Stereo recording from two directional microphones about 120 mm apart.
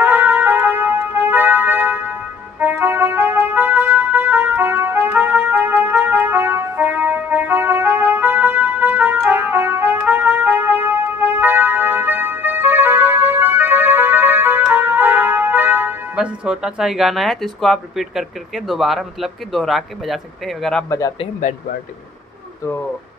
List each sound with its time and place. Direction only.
0.0 s music: 15° right (ahead or behind)
2.6 s trumpet: 15° right (ahead or behind); by 20.8 s centre (ahead or behind)